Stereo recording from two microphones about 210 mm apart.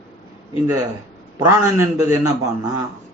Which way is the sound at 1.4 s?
15° right (ahead or behind).